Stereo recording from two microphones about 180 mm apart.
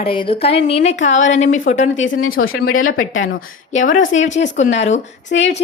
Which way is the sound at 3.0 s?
90° left.